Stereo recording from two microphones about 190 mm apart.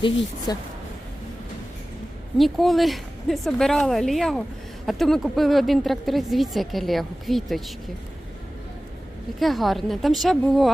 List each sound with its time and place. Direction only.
0.5 s speech: 20° left (ahead or behind)
2.4 s a woman's voice: centre (ahead or behind)
9.4 s a woman's voice: centre (ahead or behind)